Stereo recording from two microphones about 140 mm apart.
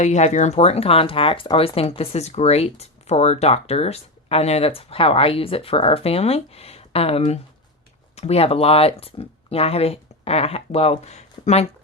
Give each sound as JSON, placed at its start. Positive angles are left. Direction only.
{"t": 0.0, "sound": "speech", "side_deg": 55}